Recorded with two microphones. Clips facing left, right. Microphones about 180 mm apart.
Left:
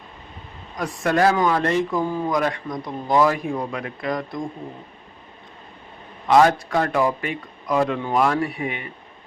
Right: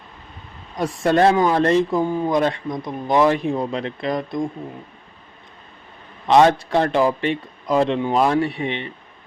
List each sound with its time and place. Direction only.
0.8 s speech: 30° right (ahead or behind)
6.2 s speech: 25° right (ahead or behind)